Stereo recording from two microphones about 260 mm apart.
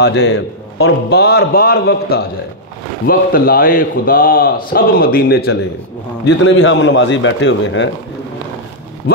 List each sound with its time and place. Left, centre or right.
0.0 s a man's voice: left
6.2 s a man's voice: left
9.1 s vehicle: left